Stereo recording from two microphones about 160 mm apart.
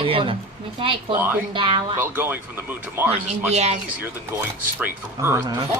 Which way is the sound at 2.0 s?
15° right (ahead or behind).